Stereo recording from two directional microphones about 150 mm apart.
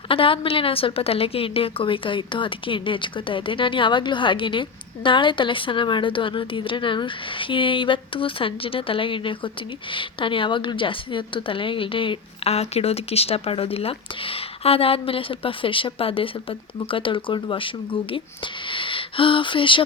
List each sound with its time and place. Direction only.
0.1 s a woman's voice: 35° left (ahead or behind)
18.7 s speech: 35° left (ahead or behind)